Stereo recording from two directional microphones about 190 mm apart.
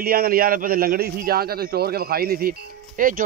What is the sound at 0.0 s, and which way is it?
A man's voice, 50° right (ahead or behind).